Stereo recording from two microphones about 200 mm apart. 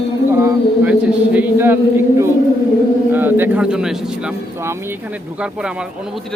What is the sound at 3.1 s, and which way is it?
A man's voice, 10° right (ahead or behind).